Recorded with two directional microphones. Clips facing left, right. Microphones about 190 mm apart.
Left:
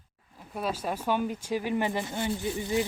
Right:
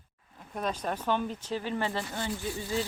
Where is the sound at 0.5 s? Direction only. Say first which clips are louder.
Left 1 dB; 5° left (ahead or behind).